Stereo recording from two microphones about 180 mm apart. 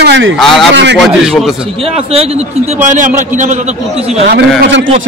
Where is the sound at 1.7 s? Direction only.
30° right (ahead or behind).